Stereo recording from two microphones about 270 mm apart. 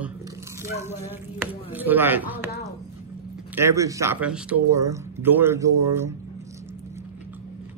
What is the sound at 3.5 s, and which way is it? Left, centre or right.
Speech, centre.